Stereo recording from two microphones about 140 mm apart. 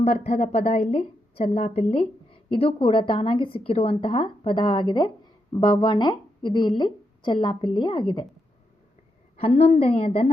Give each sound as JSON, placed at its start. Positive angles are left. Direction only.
{"t": 0.0, "sound": "a woman's voice", "side_deg": 50}
{"t": 9.4, "sound": "a woman's voice", "side_deg": 45}